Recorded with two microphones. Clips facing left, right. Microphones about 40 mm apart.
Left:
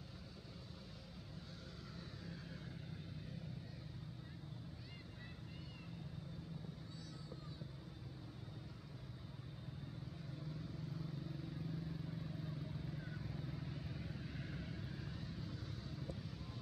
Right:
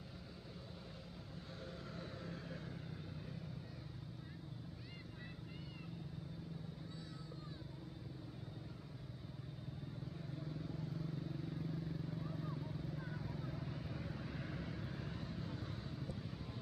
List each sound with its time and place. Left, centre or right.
2.0 s vehicle: right
10.6 s vehicle: centre
12.5 s vehicle: centre; by 16.0 s right
16.0 s vehicle: centre